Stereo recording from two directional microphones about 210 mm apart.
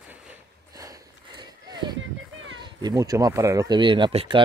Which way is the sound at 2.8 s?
15° right (ahead or behind).